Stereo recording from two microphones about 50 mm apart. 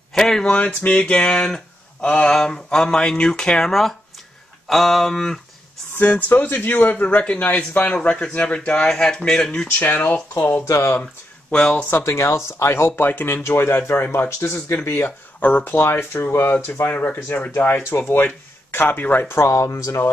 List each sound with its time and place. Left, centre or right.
0.1 s a sound: centre
0.5 s a sound: left; by 3.9 s centre
4.6 s speech: centre
5.9 s a man's voice: left
8.8 s a sound: centre
9.7 s a man's voice: left
10.7 s speech: left
11.5 s speech: left
12.0 s speech: left
13.3 s speech: left
15.0 s speech: left
15.7 s speech: left
16.9 s speech: left
19.2 s speech: left